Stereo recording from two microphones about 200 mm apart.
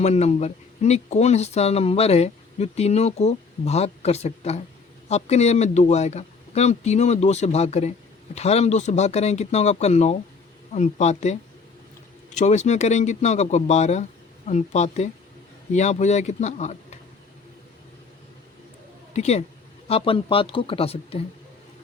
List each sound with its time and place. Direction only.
0.0 s speech: 35° left (ahead or behind)
19.1 s speech: 35° left (ahead or behind)